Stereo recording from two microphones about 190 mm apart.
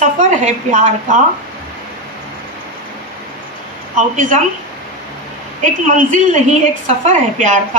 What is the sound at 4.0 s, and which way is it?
Speech, 40° right (ahead or behind).